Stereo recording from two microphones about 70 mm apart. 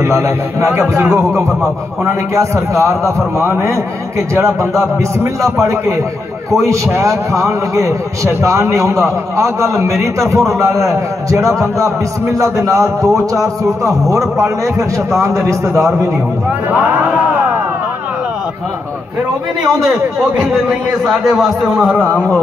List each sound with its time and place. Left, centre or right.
0.0 s a man's voice: right
16.7 s speech: right
19.6 s a man's voice: centre